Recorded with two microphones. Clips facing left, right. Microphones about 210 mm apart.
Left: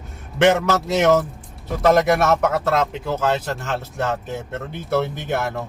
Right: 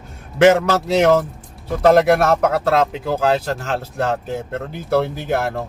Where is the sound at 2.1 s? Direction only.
35° right (ahead or behind).